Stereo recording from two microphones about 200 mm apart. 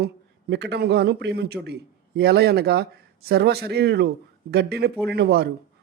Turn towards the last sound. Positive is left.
turn(degrees=-55)  # may be behind; listen again after turning